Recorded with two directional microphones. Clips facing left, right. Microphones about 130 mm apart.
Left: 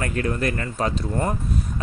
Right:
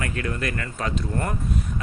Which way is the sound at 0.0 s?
35° left (ahead or behind).